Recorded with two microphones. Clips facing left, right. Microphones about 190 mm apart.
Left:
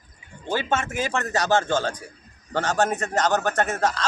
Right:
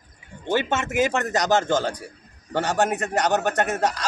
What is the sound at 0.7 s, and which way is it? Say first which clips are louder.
A man's voice: right 4 dB; 20° right (ahead or behind).